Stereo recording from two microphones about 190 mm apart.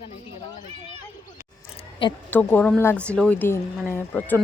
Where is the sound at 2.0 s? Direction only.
25° left (ahead or behind).